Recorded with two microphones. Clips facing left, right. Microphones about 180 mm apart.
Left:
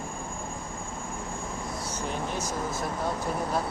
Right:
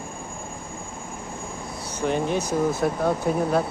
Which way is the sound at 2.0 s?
70° right (ahead or behind).